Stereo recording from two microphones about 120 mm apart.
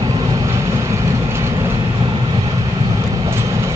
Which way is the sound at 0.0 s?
35° right (ahead or behind).